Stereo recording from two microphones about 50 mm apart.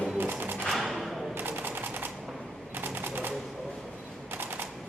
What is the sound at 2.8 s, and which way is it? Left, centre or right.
Typewriter, right.